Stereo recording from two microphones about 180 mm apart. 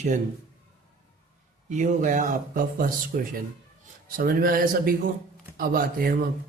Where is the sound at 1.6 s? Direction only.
45° right (ahead or behind).